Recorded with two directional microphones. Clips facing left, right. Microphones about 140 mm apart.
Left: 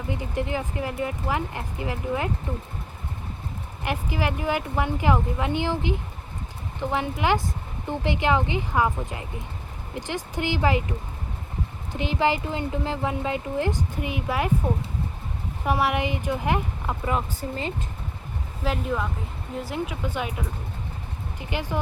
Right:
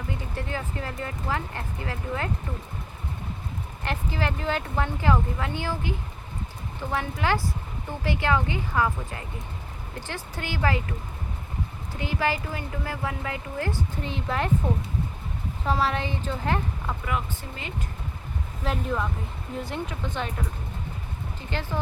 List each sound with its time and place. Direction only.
0.1 s speech: 15° left (ahead or behind)
3.8 s speech: 15° left (ahead or behind)
11.9 s speech: 20° left (ahead or behind)
15.6 s speech: 15° left (ahead or behind)
17.1 s speech: 35° left (ahead or behind)
18.6 s speech: centre (ahead or behind)
21.5 s speech: 15° left (ahead or behind)